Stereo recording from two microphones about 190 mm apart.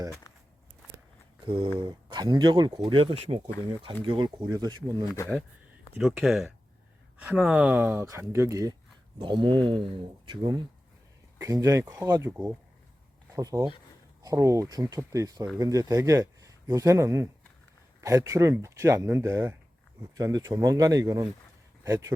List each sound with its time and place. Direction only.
1.5 s speech: 30° right (ahead or behind)
6.0 s speech: centre (ahead or behind)